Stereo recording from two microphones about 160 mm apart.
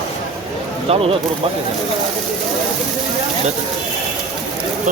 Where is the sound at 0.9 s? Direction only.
35° right (ahead or behind).